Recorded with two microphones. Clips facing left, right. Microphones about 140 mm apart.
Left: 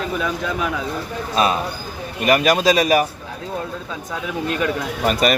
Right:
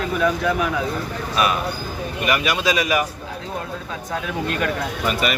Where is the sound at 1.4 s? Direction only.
30° left (ahead or behind).